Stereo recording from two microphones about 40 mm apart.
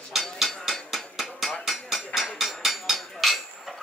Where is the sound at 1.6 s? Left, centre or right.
Centre.